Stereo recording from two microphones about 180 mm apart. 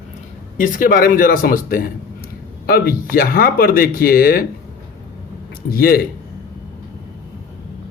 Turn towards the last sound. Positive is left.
turn(degrees=55)  # may be behind; listen again after turning